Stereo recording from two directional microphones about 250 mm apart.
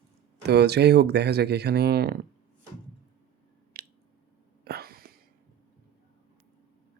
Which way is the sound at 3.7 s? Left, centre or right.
Right.